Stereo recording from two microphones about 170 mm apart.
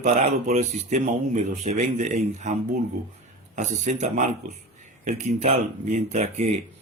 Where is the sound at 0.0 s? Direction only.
45° right (ahead or behind).